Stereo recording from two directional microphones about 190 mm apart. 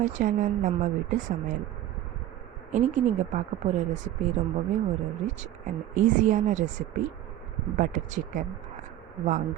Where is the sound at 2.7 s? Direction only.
40° right (ahead or behind).